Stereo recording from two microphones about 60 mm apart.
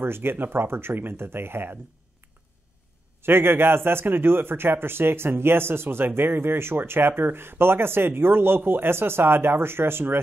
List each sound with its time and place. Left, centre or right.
0.0 s a man's voice: right
3.2 s a man's voice: right